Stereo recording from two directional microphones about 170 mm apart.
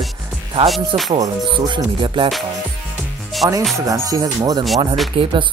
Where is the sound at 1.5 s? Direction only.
30° right (ahead or behind).